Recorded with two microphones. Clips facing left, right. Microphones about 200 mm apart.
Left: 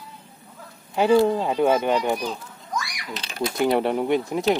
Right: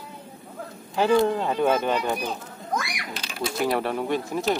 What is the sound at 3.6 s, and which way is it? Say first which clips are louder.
Speech: left 4 dB; 20° left (ahead or behind).